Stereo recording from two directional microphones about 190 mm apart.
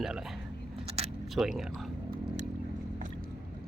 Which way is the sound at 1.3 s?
Centre (ahead or behind).